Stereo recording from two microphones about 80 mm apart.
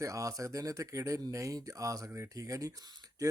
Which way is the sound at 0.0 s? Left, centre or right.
Right.